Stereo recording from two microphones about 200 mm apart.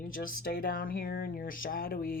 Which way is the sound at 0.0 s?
45° left (ahead or behind).